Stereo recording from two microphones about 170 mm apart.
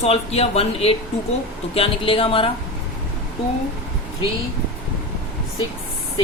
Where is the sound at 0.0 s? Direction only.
35° left (ahead or behind).